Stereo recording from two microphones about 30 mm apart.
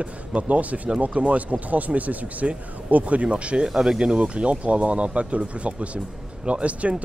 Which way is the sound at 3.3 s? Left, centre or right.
Right.